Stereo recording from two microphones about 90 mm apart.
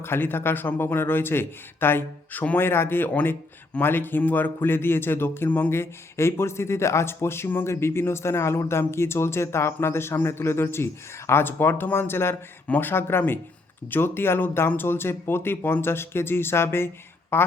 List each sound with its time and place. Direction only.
0.0 s speech: 25° left (ahead or behind)